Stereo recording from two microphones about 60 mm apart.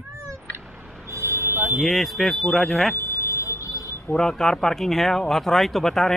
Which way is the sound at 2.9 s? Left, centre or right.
Left.